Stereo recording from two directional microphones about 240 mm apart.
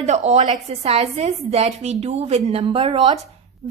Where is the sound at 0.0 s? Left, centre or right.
Right.